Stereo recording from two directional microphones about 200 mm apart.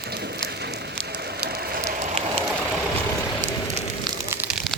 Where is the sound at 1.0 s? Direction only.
55° right (ahead or behind).